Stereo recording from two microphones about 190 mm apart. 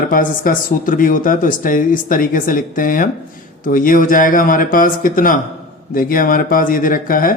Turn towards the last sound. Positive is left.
turn(degrees=50)  # may be behind; listen again after turning